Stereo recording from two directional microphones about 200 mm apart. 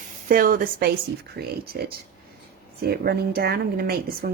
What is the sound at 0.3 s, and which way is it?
Speech, 45° right (ahead or behind).